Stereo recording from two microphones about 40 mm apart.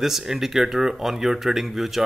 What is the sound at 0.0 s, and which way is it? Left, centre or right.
Speech, centre.